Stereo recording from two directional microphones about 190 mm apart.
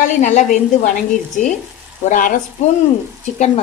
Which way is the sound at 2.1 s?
45° left (ahead or behind).